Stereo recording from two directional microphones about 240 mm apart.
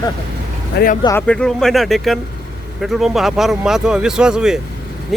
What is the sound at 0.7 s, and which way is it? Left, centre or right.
Speech, left.